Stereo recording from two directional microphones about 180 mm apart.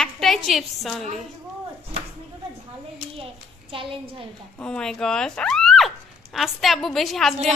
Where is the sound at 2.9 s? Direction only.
30° right (ahead or behind).